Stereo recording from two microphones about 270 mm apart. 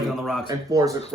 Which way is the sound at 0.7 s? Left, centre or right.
Centre.